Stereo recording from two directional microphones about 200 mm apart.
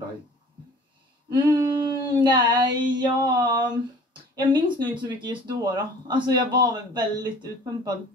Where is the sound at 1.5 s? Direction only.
20° right (ahead or behind).